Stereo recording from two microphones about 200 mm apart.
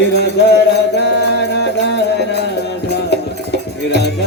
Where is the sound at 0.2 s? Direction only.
55° left (ahead or behind).